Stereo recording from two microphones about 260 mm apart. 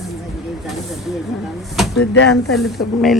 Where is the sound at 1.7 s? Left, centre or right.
Centre.